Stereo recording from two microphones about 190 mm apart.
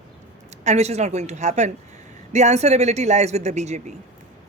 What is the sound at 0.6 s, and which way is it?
A woman's voice, 35° right (ahead or behind).